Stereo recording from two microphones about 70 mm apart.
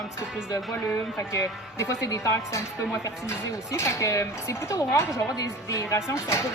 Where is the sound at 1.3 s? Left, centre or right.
Left.